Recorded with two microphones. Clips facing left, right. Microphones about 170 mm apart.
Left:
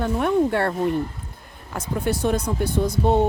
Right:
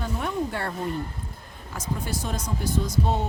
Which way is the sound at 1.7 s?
60° left (ahead or behind).